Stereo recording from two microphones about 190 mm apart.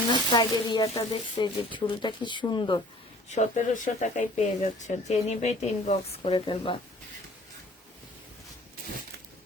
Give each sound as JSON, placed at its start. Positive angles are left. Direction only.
{"t": 0.1, "sound": "speech", "side_deg": 20}
{"t": 3.2, "sound": "speech", "side_deg": 35}